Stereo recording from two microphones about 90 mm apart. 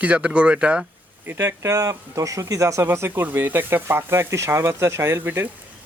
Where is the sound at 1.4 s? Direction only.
35° right (ahead or behind).